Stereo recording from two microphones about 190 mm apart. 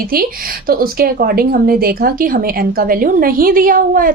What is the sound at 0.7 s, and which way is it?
Speech, 50° right (ahead or behind).